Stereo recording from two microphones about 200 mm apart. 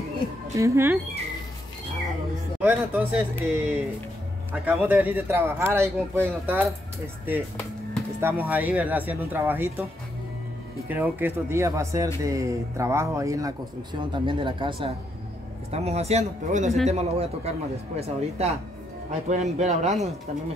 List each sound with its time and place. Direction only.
0.6 s speech: 15° right (ahead or behind)
2.6 s speech: 10° right (ahead or behind)
4.8 s speech: 10° right (ahead or behind)
8.2 s speech: 10° right (ahead or behind)
10.9 s speech: 10° right (ahead or behind); by 20.0 s 35° right (ahead or behind)